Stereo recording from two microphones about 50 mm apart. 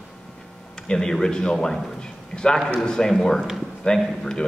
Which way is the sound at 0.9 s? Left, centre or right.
Centre.